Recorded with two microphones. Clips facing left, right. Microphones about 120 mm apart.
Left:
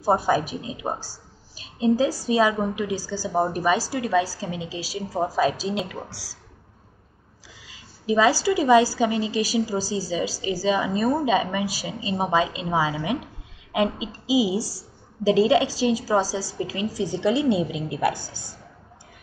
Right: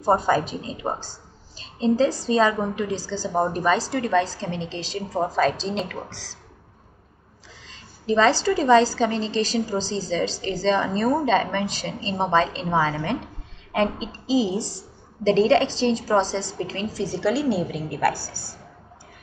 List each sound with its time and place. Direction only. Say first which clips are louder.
0.0 s a woman's voice: right 1 dB; 10° left (ahead or behind)
7.6 s a woman's voice: even; 10° left (ahead or behind)